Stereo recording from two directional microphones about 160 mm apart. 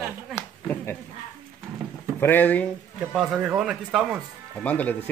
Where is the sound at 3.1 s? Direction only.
5° right (ahead or behind).